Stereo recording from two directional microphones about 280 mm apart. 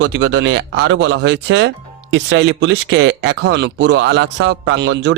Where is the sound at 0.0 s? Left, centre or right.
Right.